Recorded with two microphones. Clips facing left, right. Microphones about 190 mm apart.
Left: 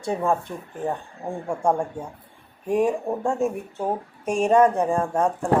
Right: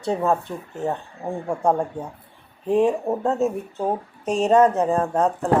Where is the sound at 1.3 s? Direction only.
15° right (ahead or behind).